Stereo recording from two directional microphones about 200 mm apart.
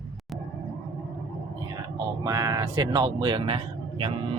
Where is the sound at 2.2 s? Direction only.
20° right (ahead or behind).